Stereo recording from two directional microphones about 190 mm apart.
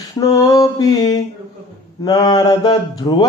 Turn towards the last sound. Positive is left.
turn(degrees=20)  # may be behind; listen again after turning